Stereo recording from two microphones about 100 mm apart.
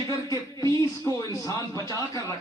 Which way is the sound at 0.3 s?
35° left (ahead or behind).